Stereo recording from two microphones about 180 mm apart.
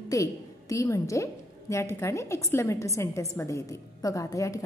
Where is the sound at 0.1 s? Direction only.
20° left (ahead or behind).